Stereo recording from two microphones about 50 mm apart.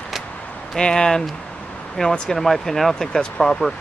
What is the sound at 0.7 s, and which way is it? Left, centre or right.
Speech, centre.